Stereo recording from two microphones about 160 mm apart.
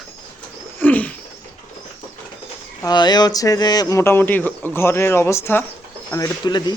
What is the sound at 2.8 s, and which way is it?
Speech, 25° left (ahead or behind).